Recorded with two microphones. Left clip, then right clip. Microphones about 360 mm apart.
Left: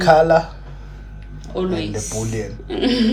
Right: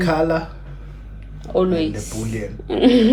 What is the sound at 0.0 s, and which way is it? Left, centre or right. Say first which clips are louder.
Speech: left 7 dB; centre.